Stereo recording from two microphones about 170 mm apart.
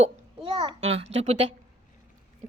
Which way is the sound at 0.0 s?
30° right (ahead or behind).